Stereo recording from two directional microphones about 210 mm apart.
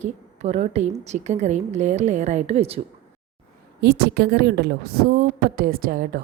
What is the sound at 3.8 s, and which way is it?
A woman's voice, 50° right (ahead or behind).